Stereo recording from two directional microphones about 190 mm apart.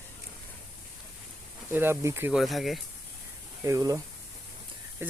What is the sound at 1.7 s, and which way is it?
Speech, 10° right (ahead or behind).